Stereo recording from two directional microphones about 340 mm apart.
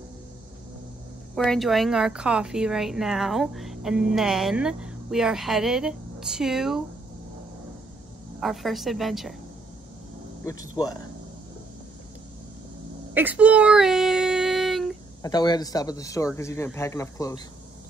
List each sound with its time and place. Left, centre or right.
1.3 s a woman's voice: centre
8.4 s a woman's voice: centre
10.4 s a man's voice: centre
13.1 s a sound: centre
15.2 s a man's voice: centre